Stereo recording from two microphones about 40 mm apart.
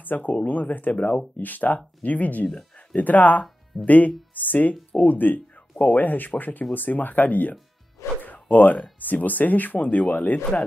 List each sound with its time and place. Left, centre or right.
0.0 s speech: left
8.2 s a sound: left
9.0 s speech: left